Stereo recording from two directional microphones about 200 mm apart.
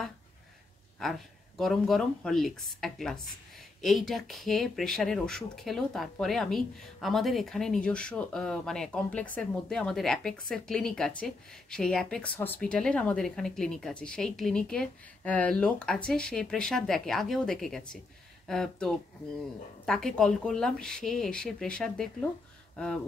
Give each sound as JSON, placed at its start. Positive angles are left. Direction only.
{"t": 1.0, "sound": "a woman's voice", "side_deg": 5}